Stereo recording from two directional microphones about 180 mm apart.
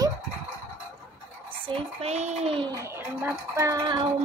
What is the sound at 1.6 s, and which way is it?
A child's voice, 35° right (ahead or behind).